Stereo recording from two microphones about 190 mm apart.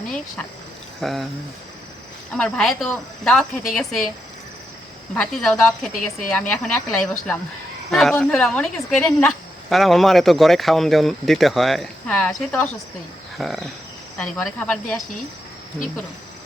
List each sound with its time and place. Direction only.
1.0 s a woman's voice: centre (ahead or behind)
2.3 s a woman's voice: 5° left (ahead or behind)
5.1 s a woman's voice: centre (ahead or behind)